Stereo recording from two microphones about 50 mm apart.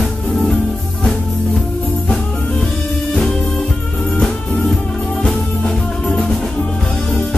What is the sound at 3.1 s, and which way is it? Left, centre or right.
Music, centre.